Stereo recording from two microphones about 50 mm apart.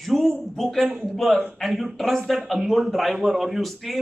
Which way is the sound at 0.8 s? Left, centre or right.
Right.